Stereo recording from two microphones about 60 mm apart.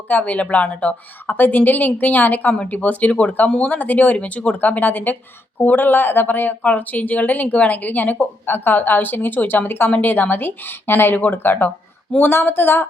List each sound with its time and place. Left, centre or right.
0.1 s speech: left
1.4 s speech: left